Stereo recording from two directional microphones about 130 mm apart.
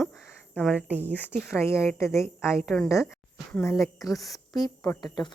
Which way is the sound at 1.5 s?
20° left (ahead or behind).